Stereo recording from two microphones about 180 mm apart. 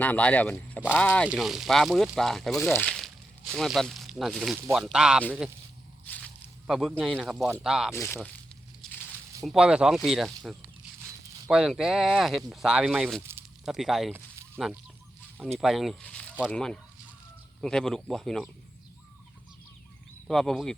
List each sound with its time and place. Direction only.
0.0 s speech: 10° left (ahead or behind)
6.1 s a sound: 10° left (ahead or behind)
6.7 s speech: centre (ahead or behind)
7.9 s speech: 10° left (ahead or behind)
9.0 s a sound: 20° right (ahead or behind)
9.5 s speech: 5° right (ahead or behind)
14.1 s a sound: 15° right (ahead or behind)
15.5 s speech: centre (ahead or behind)
20.2 s speech: centre (ahead or behind)